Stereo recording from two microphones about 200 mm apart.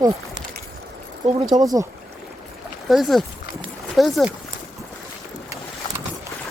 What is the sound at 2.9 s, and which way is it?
Speech, centre (ahead or behind).